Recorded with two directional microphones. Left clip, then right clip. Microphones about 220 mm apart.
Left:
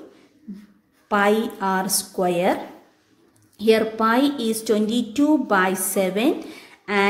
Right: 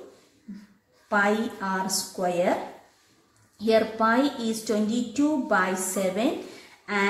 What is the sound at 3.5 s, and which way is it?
A woman's voice, 45° left (ahead or behind).